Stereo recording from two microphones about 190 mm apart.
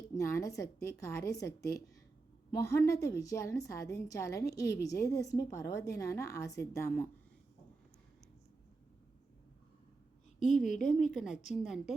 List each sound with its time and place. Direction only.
0.2 s a woman's voice: 15° left (ahead or behind)
10.7 s a woman's voice: 40° left (ahead or behind)
11.5 s a woman's voice: centre (ahead or behind)